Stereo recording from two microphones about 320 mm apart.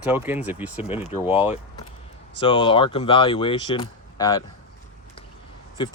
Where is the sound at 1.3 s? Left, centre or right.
Centre.